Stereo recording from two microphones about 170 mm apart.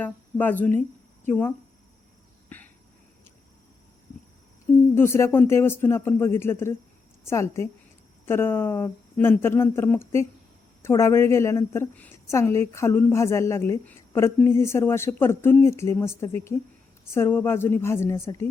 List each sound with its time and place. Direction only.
0.0 s speech: 10° left (ahead or behind)
0.8 s a sound: 10° left (ahead or behind)
4.9 s a woman's voice: 15° left (ahead or behind)